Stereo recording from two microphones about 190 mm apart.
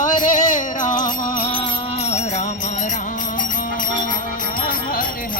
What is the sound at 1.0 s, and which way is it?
Music, 25° left (ahead or behind).